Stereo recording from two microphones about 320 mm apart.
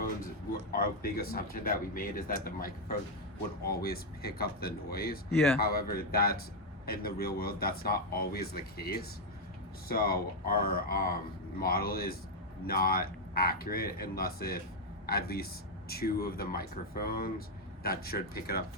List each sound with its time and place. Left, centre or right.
0.7 s speech: left